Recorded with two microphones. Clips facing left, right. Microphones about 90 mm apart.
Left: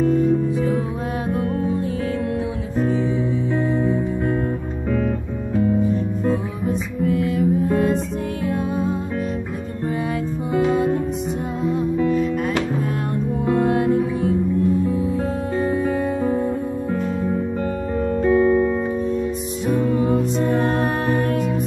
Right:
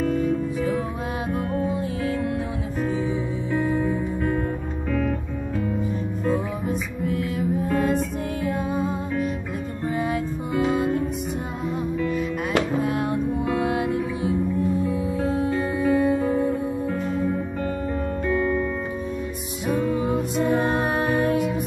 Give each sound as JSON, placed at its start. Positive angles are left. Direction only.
{"t": 6.2, "sound": "music", "side_deg": 0}
{"t": 13.5, "sound": "music", "side_deg": -5}
{"t": 15.5, "sound": "music", "side_deg": -5}
{"t": 18.2, "sound": "music", "side_deg": 20}
{"t": 20.0, "sound": "music", "side_deg": -10}